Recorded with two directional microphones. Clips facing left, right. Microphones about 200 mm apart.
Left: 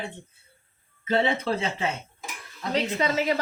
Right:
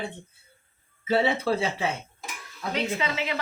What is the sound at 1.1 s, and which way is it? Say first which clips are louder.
Speech: right 1 dB; 5° right (ahead or behind).